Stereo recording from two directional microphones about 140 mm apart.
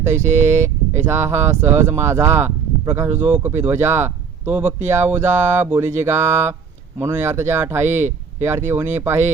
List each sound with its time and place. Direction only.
0.1 s speech: 55° right (ahead or behind)
0.3 s speech: 20° right (ahead or behind)